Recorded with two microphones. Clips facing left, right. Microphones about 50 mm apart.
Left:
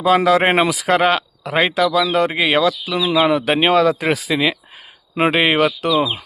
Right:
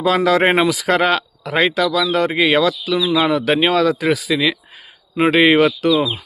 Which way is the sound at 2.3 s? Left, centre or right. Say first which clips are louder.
Right 1 dB; centre.